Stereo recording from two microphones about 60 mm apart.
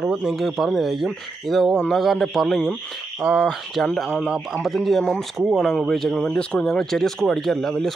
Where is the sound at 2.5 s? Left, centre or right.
Centre.